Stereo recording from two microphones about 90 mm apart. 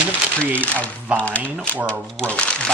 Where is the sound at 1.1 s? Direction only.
10° right (ahead or behind).